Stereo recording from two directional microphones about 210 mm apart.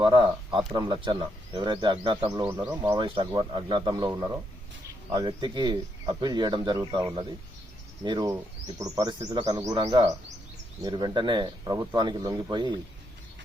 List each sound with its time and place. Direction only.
0.0 s speech: 25° right (ahead or behind)
2.5 s speech: 10° right (ahead or behind)
2.8 s speech: 20° right (ahead or behind)